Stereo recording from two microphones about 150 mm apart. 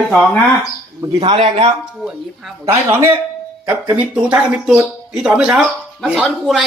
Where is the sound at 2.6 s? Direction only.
15° right (ahead or behind).